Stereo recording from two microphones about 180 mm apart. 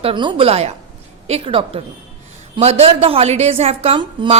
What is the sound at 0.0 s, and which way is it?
Speech, 25° right (ahead or behind).